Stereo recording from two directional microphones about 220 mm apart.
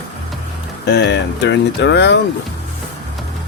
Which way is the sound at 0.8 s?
50° left (ahead or behind).